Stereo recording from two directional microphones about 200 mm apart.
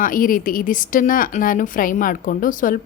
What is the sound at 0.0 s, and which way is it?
A woman's voice, 45° left (ahead or behind).